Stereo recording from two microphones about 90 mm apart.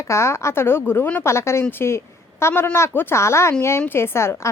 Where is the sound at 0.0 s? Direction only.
30° left (ahead or behind).